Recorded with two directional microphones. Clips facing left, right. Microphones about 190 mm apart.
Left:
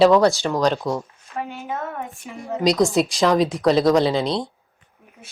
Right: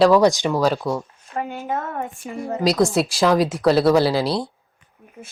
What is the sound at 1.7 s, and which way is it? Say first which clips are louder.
Speech: right 3 dB; 40° right (ahead or behind).